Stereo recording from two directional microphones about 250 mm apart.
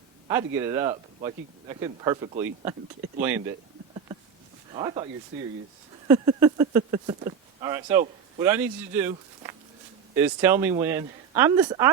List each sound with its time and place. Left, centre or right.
0.3 s speech: centre
3.2 s speech: centre
4.7 s speech: centre
6.1 s speech: centre